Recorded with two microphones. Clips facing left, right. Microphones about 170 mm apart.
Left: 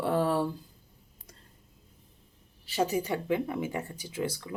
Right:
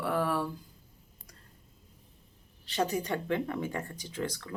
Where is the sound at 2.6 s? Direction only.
5° left (ahead or behind).